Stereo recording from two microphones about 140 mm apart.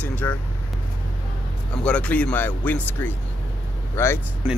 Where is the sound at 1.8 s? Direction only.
10° left (ahead or behind).